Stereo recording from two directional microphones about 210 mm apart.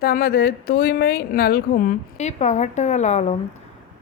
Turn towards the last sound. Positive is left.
turn(degrees=35)  # may be behind; listen again after turning